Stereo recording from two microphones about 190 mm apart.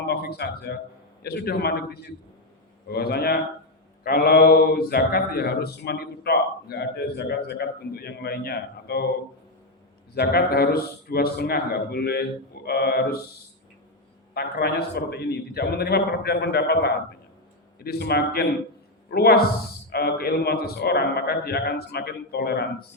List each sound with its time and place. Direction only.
0.1 s a man's voice: 55° left (ahead or behind)
10.2 s speech: 55° left (ahead or behind)
14.3 s a man's voice: 55° left (ahead or behind)